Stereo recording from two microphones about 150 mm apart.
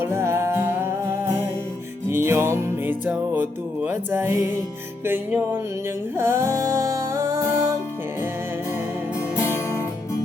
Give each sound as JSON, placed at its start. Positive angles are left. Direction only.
{"t": 0.0, "sound": "music", "side_deg": -20}
{"t": 2.0, "sound": "music", "side_deg": -15}
{"t": 9.3, "sound": "music", "side_deg": 20}